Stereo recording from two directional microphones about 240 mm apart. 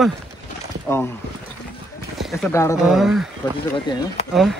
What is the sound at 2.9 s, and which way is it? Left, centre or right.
Speech, centre.